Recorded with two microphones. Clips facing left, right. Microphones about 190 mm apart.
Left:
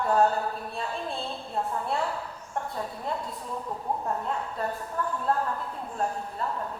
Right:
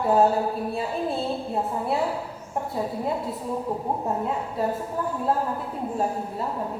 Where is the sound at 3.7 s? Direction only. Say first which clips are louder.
Right 2 dB; 25° right (ahead or behind).